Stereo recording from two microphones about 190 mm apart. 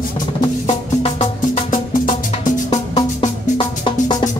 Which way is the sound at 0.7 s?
30° left (ahead or behind).